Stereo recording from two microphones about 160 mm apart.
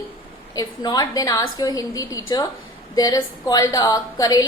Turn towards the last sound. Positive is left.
turn(degrees=25)  # may be behind; listen again after turning